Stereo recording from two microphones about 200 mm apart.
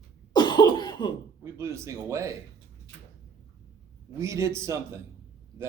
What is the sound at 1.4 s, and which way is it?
Speech, 15° right (ahead or behind).